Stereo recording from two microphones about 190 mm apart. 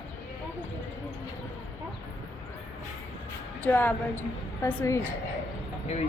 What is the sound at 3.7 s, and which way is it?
Speech, 10° left (ahead or behind).